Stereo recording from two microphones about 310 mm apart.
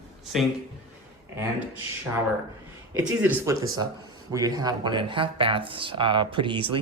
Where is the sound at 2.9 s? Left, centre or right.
Centre.